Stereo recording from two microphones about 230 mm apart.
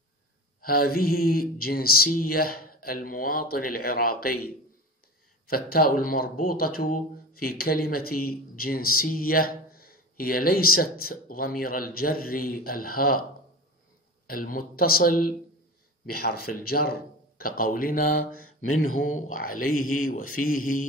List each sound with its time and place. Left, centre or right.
0.6 s speech: left
5.5 s speech: left
14.2 s speech: left
18.9 s a man's voice: left
19.2 s speech: left